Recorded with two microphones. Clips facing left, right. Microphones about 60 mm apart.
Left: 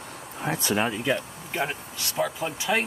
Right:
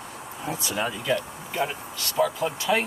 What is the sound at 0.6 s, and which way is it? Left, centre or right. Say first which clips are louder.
Speech: left 4 dB; left.